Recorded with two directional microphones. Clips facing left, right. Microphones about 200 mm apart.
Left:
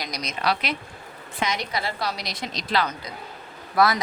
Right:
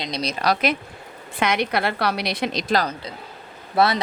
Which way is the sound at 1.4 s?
60° right (ahead or behind).